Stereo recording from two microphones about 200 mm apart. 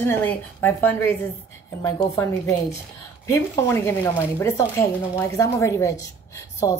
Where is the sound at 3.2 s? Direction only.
10° left (ahead or behind).